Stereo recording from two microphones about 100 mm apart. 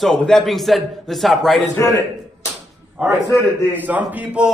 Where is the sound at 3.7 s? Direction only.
15° right (ahead or behind).